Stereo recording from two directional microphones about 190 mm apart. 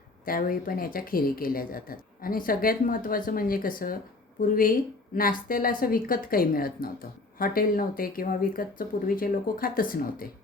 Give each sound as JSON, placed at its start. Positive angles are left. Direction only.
{"t": 0.3, "sound": "speech", "side_deg": 50}